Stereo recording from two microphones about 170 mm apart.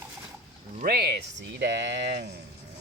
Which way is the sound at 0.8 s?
65° right (ahead or behind).